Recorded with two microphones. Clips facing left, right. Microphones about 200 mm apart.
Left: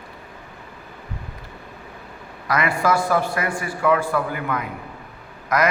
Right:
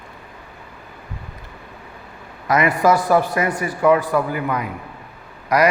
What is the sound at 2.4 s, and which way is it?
A man's voice, 20° right (ahead or behind).